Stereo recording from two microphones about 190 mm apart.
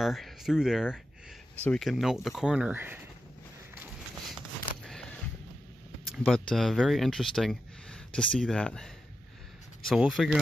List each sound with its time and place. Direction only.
0.0 s speech: centre (ahead or behind)
4.4 s a sound: centre (ahead or behind)
6.1 s speech: centre (ahead or behind)